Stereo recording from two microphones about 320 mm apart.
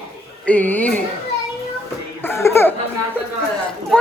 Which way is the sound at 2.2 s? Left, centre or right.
Centre.